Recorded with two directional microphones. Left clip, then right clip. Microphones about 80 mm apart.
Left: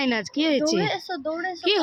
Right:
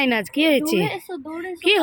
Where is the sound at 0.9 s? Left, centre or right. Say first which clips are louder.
Left 2 dB; left.